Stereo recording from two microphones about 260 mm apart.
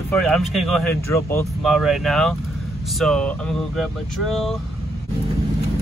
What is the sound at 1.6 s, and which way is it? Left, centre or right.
Speech, centre.